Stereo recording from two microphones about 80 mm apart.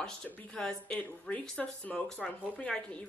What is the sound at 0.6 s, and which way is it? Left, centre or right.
Speech, centre.